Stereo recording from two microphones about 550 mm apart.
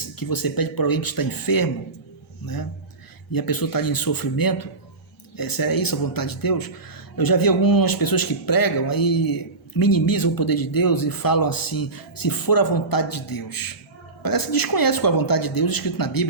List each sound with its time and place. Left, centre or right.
0.2 s speech: left
3.3 s speech: left